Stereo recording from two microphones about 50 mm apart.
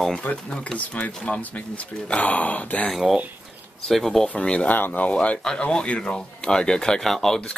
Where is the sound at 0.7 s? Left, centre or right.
Left.